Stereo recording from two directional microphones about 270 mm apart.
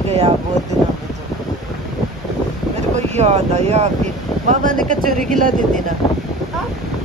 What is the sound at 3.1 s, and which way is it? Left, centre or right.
Speech, right.